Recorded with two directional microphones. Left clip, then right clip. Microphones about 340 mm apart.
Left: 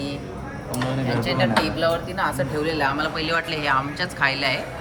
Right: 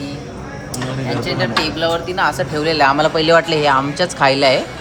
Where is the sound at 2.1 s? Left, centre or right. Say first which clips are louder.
Right 6 dB; right.